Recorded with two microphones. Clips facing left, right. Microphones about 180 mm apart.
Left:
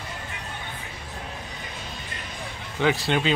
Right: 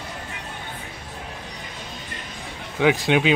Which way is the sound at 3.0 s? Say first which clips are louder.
Right 4 dB; 10° right (ahead or behind).